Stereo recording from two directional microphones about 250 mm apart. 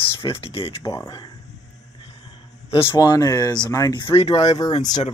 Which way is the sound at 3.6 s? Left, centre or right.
Centre.